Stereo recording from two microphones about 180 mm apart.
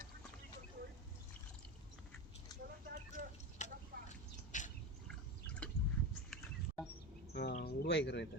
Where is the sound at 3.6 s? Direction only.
40° left (ahead or behind).